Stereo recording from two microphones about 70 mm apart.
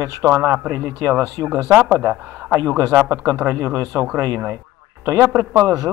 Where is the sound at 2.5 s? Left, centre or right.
Right.